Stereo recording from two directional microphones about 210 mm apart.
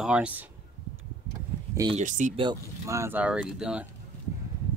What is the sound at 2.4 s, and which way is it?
Speech, 15° right (ahead or behind).